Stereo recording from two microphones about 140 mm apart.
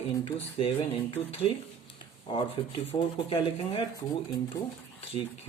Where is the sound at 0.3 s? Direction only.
40° left (ahead or behind).